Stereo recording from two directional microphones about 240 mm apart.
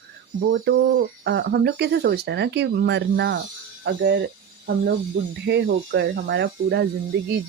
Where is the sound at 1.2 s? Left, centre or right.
Right.